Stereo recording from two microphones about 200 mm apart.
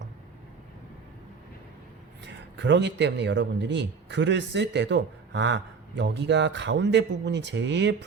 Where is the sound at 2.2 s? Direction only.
60° right (ahead or behind).